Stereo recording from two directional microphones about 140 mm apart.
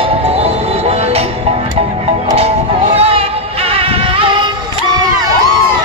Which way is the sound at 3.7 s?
40° right (ahead or behind).